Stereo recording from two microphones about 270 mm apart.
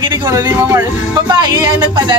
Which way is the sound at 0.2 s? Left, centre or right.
Centre.